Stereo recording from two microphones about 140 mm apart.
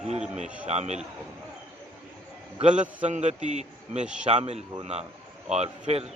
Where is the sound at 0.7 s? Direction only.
50° right (ahead or behind).